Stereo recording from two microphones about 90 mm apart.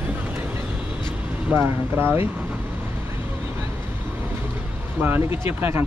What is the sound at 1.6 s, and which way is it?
Speech, 25° right (ahead or behind).